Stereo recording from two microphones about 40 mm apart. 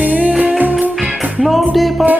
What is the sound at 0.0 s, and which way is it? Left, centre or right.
Music, right.